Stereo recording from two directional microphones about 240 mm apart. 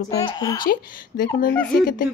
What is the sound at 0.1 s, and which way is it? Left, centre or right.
Speech, centre.